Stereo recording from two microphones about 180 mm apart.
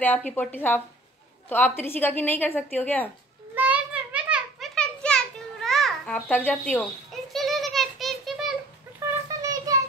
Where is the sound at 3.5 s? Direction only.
10° right (ahead or behind).